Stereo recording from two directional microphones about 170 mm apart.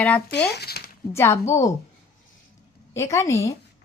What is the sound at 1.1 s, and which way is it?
Speech, 15° left (ahead or behind).